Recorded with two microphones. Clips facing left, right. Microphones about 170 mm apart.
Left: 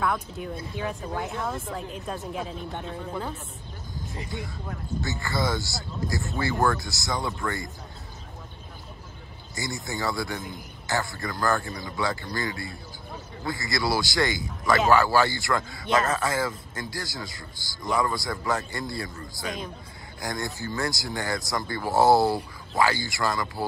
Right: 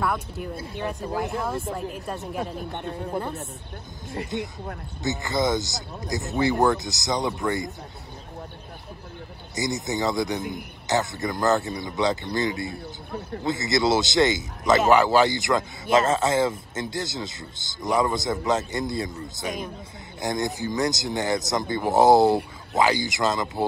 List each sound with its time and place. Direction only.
0.0 s speech: 5° right (ahead or behind)
4.3 s speech: 20° right (ahead or behind)
9.6 s speech: 20° right (ahead or behind)